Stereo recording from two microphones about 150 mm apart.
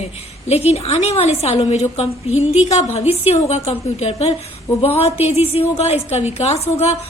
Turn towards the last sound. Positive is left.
turn(degrees=45)  # may be behind; listen again after turning